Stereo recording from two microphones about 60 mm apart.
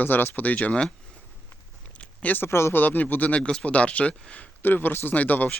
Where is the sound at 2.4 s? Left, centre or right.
Left.